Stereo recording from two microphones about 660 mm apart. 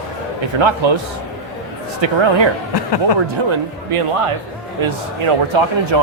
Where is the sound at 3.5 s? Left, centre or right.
Right.